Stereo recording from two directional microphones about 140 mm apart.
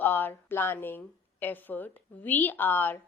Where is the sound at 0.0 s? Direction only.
15° left (ahead or behind).